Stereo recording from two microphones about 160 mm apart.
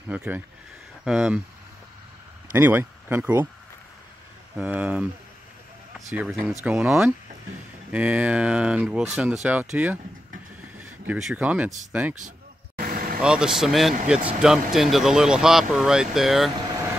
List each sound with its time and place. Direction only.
0.1 s speech: 5° right (ahead or behind)
2.5 s speech: 10° right (ahead or behind)
4.6 s speech: 10° right (ahead or behind)
6.1 s speech: 10° right (ahead or behind)
12.7 s vehicle: 65° right (ahead or behind)
13.2 s speech: 5° right (ahead or behind)